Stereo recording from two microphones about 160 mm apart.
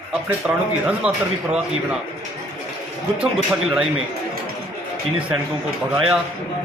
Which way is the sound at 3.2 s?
5° right (ahead or behind).